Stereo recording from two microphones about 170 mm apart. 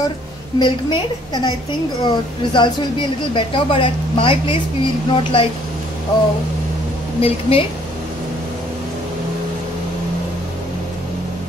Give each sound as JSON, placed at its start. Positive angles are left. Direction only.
{"t": 0.6, "sound": "a woman's voice", "side_deg": 30}
{"t": 7.2, "sound": "a woman's voice", "side_deg": 35}